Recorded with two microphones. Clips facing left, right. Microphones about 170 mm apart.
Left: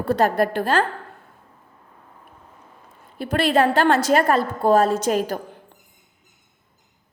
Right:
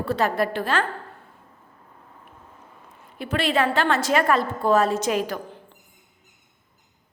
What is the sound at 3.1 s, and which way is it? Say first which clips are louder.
A woman's voice: left 4 dB; 45° left (ahead or behind).